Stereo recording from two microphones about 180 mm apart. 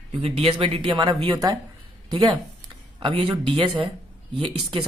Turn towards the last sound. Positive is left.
turn(degrees=-30)  # may be behind; listen again after turning